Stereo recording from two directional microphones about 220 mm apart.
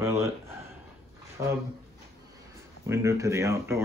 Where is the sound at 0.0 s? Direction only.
15° right (ahead or behind).